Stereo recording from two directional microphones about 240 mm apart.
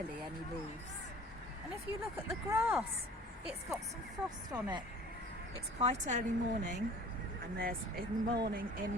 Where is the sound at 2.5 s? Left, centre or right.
Centre.